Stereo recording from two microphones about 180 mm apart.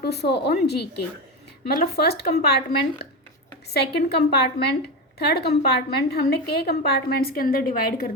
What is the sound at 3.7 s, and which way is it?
A woman's voice, 65° left (ahead or behind).